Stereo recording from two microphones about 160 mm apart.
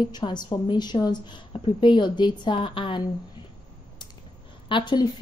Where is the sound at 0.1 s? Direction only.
25° left (ahead or behind).